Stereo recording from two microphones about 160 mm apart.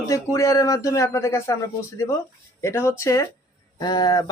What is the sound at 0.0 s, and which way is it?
Speech, 20° left (ahead or behind).